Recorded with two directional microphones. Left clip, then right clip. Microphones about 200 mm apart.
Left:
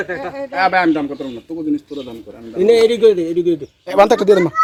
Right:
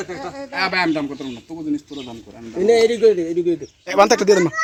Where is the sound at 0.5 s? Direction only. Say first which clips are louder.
Left 5 dB; 50° right (ahead or behind).